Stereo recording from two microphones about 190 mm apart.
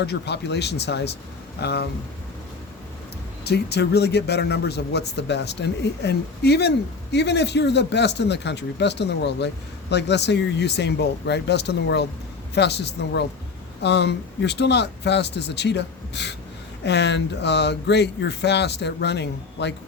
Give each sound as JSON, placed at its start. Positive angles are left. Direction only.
{"t": 0.0, "sound": "speech", "side_deg": 60}
{"t": 3.4, "sound": "speech", "side_deg": 60}